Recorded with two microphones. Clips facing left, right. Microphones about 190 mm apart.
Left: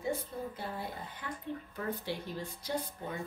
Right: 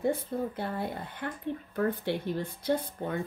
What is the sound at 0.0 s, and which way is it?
Speech, 60° right (ahead or behind).